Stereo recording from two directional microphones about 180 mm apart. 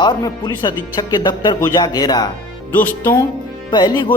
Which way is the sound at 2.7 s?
10° left (ahead or behind).